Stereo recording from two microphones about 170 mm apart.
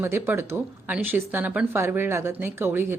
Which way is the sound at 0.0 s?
15° right (ahead or behind).